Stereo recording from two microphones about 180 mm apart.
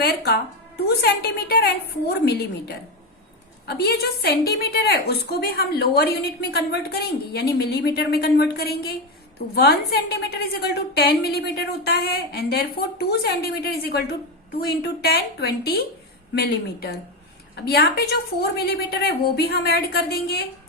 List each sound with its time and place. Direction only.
0.0 s a woman's voice: 60° left (ahead or behind)